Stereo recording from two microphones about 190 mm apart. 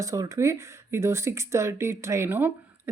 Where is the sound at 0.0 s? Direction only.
15° right (ahead or behind).